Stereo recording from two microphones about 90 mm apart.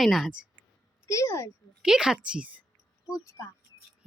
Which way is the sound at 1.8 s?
5° right (ahead or behind).